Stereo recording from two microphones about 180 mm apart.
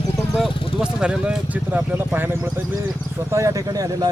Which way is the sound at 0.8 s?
5° right (ahead or behind).